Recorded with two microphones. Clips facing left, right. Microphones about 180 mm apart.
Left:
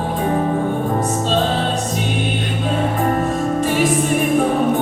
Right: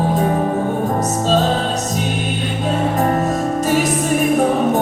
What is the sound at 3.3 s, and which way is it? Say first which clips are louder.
Music: right 1 dB; 40° right (ahead or behind).